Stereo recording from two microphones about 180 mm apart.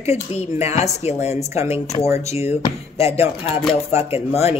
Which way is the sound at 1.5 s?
15° right (ahead or behind).